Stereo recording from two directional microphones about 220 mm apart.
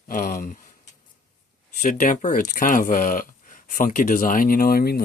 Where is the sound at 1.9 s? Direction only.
35° left (ahead or behind).